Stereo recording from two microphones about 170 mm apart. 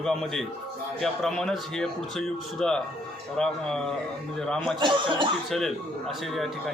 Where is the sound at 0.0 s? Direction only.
5° left (ahead or behind).